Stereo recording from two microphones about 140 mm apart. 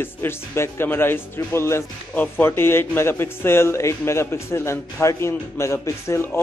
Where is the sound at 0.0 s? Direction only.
15° left (ahead or behind).